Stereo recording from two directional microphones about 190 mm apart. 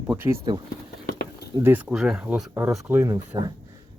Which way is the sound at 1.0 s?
60° left (ahead or behind).